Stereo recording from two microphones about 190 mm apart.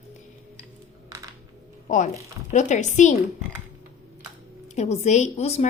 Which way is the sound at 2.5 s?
40° left (ahead or behind).